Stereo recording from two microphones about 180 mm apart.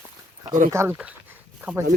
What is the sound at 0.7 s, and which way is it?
Speech, 15° right (ahead or behind).